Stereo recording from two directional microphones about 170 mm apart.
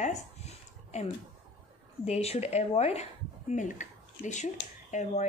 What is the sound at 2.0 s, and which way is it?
Speech, 40° left (ahead or behind).